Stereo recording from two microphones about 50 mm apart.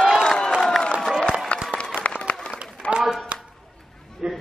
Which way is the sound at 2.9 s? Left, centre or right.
Centre.